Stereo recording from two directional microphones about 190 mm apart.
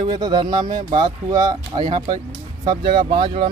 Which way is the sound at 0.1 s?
25° right (ahead or behind).